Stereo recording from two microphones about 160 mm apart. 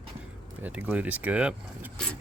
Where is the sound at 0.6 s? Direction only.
10° right (ahead or behind).